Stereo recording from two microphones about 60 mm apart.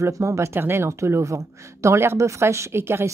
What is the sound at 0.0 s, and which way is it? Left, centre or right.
Speech, right.